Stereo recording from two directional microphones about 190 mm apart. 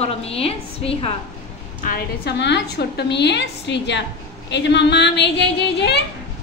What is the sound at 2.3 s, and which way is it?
A woman's voice, 65° left (ahead or behind).